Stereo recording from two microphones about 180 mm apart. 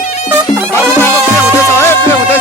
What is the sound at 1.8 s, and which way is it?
Music, 15° left (ahead or behind).